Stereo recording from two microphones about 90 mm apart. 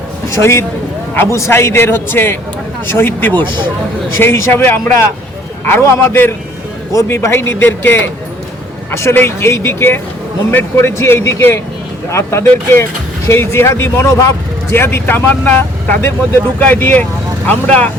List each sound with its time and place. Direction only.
0.3 s speech: 30° left (ahead or behind)